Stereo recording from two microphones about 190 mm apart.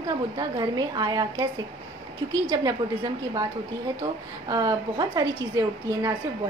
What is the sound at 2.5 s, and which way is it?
Speech, 20° right (ahead or behind).